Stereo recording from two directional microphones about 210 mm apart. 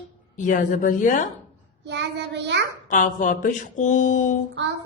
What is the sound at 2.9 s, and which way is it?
Speech, 35° left (ahead or behind).